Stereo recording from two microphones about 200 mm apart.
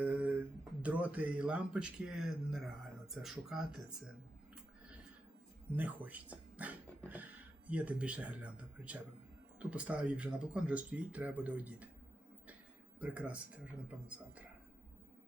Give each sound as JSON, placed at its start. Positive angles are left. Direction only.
{"t": 0.0, "sound": "speech", "side_deg": -10}
{"t": 5.7, "sound": "speech", "side_deg": -10}
{"t": 13.0, "sound": "speech", "side_deg": -5}